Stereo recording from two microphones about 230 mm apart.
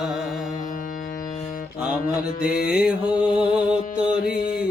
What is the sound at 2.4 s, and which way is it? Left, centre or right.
Music, left.